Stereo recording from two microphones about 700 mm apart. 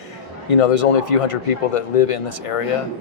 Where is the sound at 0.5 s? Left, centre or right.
Left.